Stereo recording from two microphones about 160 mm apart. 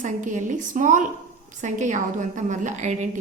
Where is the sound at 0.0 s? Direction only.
50° right (ahead or behind).